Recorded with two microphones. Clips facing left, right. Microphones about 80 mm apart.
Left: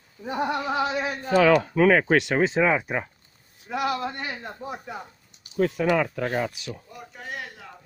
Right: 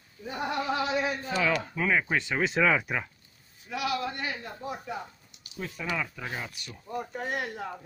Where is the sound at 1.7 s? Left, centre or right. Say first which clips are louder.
Left 9 dB; left.